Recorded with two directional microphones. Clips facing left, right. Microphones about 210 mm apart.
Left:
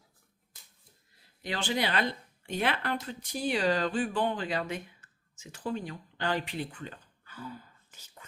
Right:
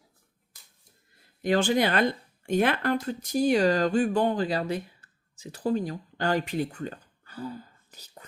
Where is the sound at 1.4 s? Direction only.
45° right (ahead or behind).